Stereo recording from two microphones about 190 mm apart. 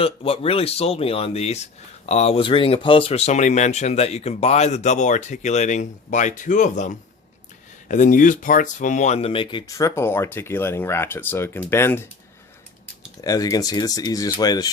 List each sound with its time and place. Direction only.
0.0 s speech: 30° left (ahead or behind); by 12.0 s 10° left (ahead or behind)
13.2 s speech: 20° left (ahead or behind)